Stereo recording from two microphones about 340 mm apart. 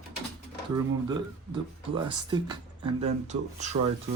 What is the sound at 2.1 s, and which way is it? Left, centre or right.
Speech, centre.